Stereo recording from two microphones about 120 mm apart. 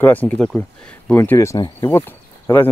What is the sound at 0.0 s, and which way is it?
Speech, 15° left (ahead or behind).